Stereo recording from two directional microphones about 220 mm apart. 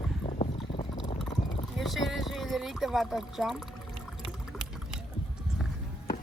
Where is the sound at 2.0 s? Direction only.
Centre (ahead or behind).